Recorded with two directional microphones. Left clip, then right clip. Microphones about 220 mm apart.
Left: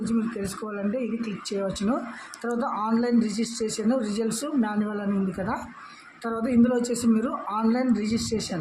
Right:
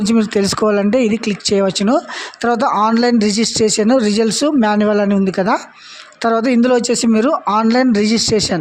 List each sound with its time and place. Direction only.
0.0 s speech: 45° right (ahead or behind)